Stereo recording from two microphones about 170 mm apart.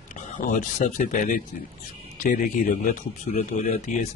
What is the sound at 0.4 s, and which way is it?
Speech, 50° left (ahead or behind).